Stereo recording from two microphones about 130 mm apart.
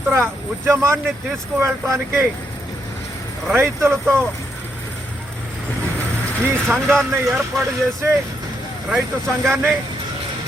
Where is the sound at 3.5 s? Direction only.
20° right (ahead or behind).